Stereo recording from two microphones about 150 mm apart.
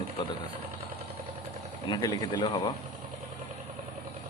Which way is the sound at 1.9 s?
25° left (ahead or behind).